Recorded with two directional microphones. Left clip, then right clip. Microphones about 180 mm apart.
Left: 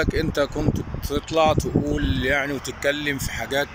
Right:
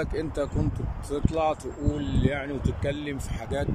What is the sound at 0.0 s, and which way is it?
Speech, 5° right (ahead or behind).